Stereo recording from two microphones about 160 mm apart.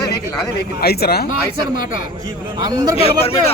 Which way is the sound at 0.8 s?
75° left (ahead or behind).